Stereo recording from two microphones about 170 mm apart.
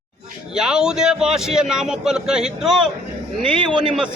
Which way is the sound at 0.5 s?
5° right (ahead or behind).